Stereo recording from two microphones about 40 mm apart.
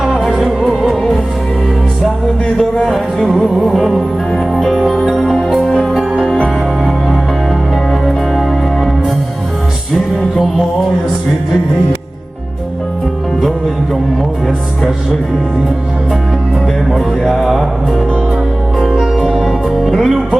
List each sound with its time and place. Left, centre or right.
0.3 s music: centre
3.6 s music: centre
5.0 s music: centre
5.6 s music: centre
7.9 s music: centre
16.9 s mantra: centre
19.2 s music: centre